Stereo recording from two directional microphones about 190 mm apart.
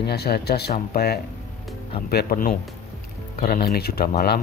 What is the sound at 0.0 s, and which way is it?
Speech, 60° left (ahead or behind).